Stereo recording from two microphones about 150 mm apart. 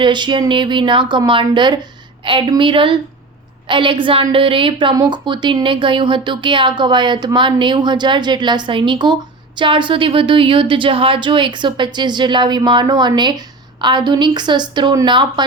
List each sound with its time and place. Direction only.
0.0 s a woman's voice: 30° right (ahead or behind)